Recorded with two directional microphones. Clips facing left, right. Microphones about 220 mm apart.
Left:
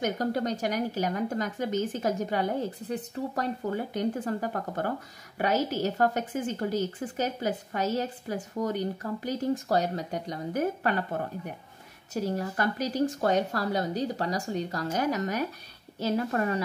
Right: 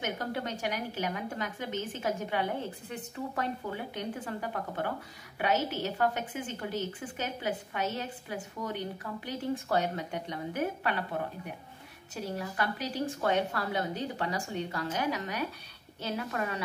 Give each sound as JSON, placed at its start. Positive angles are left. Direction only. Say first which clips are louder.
{"t": 0.0, "sound": "a woman's voice", "louder": "left 6 dB", "side_deg": 40}
{"t": 12.2, "sound": "a woman's voice", "louder": "left 5 dB", "side_deg": 45}